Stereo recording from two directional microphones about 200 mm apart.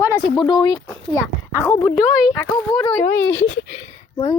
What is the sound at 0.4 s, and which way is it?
Speech, 20° left (ahead or behind).